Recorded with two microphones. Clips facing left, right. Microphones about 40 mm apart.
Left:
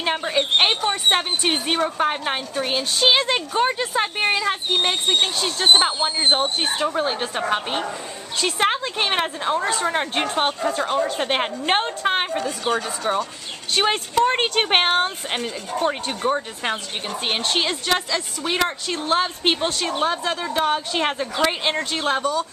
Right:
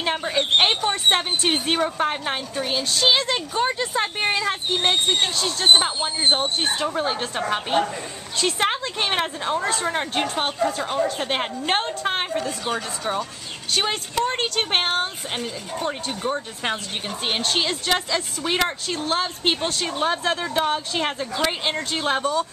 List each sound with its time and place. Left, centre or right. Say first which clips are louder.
0.0 s speech: left 1 dB; centre
14.2 s speech: left 4 dB; left
15.8 s speech: left 4 dB; left
16.2 s speech: left 5 dB; centre
17.3 s speech: left 1 dB; centre
20.1 s speech: even; centre
22.0 s speech: even; centre